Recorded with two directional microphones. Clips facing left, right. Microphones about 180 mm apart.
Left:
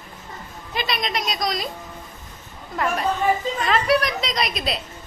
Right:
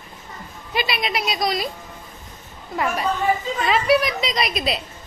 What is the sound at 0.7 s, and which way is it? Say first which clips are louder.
Speech: right 2 dB; 5° right (ahead or behind).